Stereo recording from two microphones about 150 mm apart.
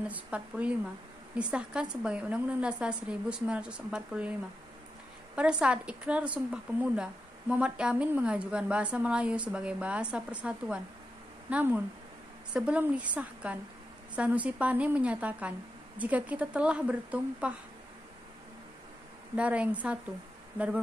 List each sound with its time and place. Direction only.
0.1 s a woman's voice: 10° right (ahead or behind)
5.3 s a woman's voice: 5° right (ahead or behind)
19.3 s a woman's voice: 10° right (ahead or behind)